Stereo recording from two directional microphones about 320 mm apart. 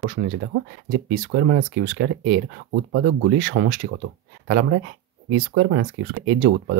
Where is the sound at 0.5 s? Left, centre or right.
Right.